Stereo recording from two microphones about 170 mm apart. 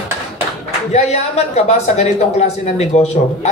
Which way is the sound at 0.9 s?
40° left (ahead or behind).